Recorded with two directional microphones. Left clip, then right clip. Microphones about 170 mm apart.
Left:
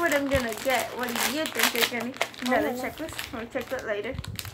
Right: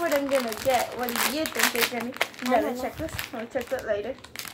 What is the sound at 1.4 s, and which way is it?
Speech, 10° right (ahead or behind).